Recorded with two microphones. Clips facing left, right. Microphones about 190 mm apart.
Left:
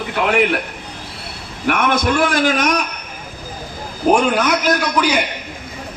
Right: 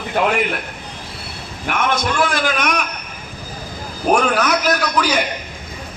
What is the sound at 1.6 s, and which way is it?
A man's voice, 55° left (ahead or behind).